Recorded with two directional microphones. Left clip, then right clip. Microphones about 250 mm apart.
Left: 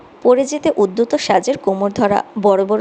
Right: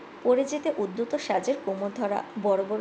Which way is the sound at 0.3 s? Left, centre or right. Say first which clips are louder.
Left 10 dB; left.